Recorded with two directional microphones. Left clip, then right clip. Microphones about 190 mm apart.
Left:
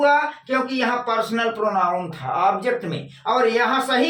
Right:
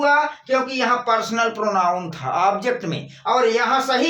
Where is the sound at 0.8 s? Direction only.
35° right (ahead or behind).